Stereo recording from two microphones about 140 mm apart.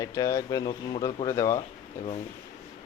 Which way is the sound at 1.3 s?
20° left (ahead or behind).